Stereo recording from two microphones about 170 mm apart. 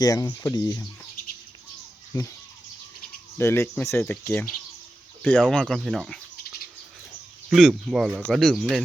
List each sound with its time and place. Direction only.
0.0 s speech: 20° left (ahead or behind)
2.1 s speech: 20° left (ahead or behind)
3.3 s speech: 15° left (ahead or behind)
5.4 s speech: centre (ahead or behind)
7.5 s speech: centre (ahead or behind)